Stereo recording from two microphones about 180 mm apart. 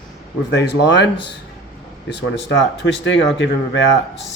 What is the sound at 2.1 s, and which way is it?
Speech, 75° left (ahead or behind).